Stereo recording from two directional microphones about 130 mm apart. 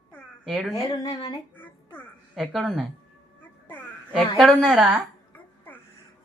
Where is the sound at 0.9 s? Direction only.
30° left (ahead or behind).